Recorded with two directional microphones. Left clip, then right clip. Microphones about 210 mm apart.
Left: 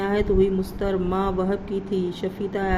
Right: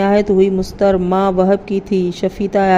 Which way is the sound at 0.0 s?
40° right (ahead or behind).